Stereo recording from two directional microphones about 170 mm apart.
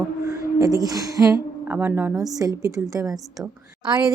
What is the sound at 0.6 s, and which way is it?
A woman's voice, 20° right (ahead or behind).